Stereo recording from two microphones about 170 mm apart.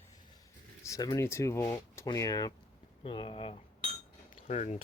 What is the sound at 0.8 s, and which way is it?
Speech, 20° left (ahead or behind).